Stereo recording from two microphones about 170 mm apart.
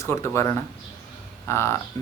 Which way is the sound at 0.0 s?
15° left (ahead or behind).